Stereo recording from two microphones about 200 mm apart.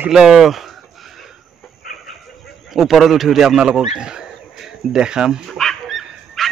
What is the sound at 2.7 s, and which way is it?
Speech, centre (ahead or behind).